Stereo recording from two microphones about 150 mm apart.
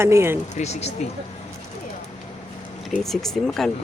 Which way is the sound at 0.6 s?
45° left (ahead or behind).